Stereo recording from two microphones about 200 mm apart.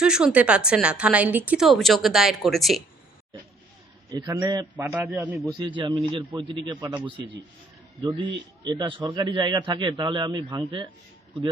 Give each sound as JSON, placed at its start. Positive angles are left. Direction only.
{"t": 0.0, "sound": "a woman's voice", "side_deg": -5}
{"t": 4.1, "sound": "a man's voice", "side_deg": -15}
{"t": 4.9, "sound": "a man's voice", "side_deg": -10}
{"t": 5.5, "sound": "a man's voice", "side_deg": -25}